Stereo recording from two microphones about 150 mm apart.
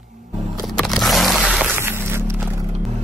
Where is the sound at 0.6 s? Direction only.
Centre (ahead or behind).